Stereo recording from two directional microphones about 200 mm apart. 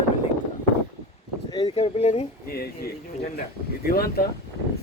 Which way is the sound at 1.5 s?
20° left (ahead or behind).